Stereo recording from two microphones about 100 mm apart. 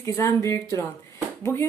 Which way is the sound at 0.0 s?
30° left (ahead or behind).